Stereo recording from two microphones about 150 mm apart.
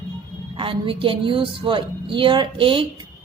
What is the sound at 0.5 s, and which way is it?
A woman's voice, 35° right (ahead or behind).